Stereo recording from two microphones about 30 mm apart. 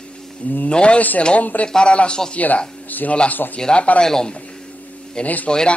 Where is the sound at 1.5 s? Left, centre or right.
Left.